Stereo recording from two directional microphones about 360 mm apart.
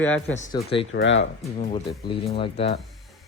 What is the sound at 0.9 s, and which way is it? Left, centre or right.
Speech, left.